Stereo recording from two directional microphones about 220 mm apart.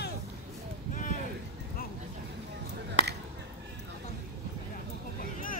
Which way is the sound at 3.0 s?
30° left (ahead or behind).